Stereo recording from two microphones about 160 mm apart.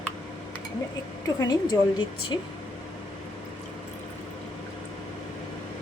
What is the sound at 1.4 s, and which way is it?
Speech, 25° left (ahead or behind).